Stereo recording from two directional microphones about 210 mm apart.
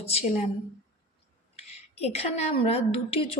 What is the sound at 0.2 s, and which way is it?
Speech, 30° left (ahead or behind).